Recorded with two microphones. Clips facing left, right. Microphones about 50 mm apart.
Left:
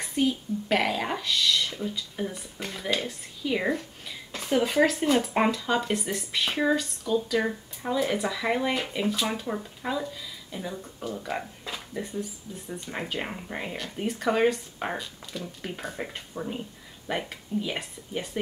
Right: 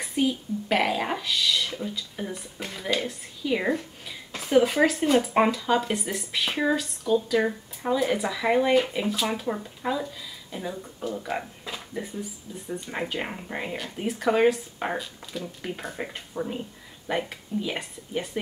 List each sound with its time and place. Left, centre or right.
0.0 s speech: centre